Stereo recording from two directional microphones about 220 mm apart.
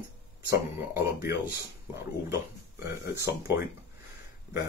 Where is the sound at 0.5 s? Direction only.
45° left (ahead or behind).